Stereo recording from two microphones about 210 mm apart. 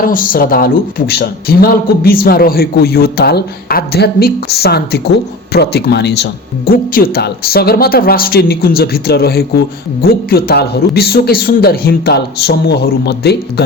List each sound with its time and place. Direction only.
0.0 s speech: 40° left (ahead or behind)